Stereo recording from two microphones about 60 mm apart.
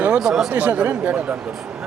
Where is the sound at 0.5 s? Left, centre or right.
Right.